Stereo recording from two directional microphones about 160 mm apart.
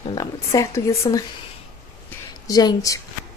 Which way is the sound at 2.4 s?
25° left (ahead or behind).